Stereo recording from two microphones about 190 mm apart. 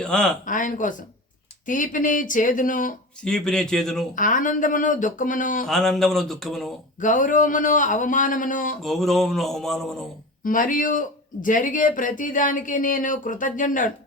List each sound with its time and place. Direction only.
0.0 s speech: 5° left (ahead or behind)
0.4 s speech: 45° left (ahead or behind)
3.2 s speech: 5° left (ahead or behind)
4.1 s speech: 45° left (ahead or behind)
5.6 s speech: centre (ahead or behind)
7.0 s speech: 40° left (ahead or behind)
8.8 s speech: centre (ahead or behind)
10.4 s speech: 45° left (ahead or behind)